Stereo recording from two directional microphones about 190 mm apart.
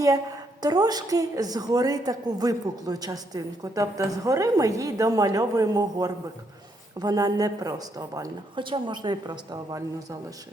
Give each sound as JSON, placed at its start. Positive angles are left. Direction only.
{"t": 0.6, "sound": "a woman's voice", "side_deg": -20}